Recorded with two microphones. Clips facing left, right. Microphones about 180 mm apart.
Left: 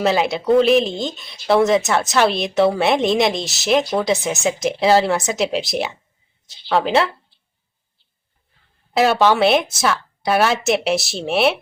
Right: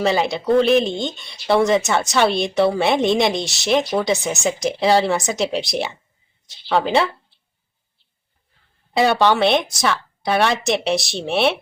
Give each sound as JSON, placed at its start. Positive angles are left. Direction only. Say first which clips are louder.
{"t": 0.0, "sound": "a woman's voice", "louder": "left 1 dB", "side_deg": 0}
{"t": 8.9, "sound": "a woman's voice", "louder": "left 1 dB", "side_deg": 0}